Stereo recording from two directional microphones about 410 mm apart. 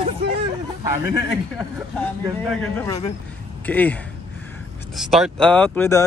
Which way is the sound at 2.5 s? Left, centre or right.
Centre.